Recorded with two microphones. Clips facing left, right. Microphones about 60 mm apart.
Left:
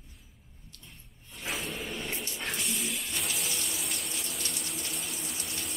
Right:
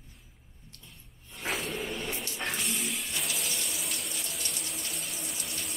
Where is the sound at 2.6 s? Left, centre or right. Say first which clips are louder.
Right 1 dB; centre.